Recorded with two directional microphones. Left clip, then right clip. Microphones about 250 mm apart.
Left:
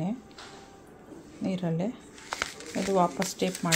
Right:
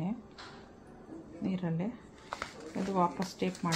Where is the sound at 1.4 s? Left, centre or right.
Left.